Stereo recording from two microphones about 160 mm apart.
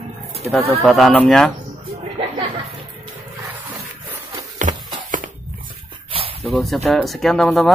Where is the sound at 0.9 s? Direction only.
Centre (ahead or behind).